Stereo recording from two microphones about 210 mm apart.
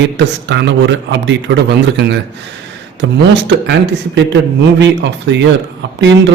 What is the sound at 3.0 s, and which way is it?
Speech, 55° right (ahead or behind).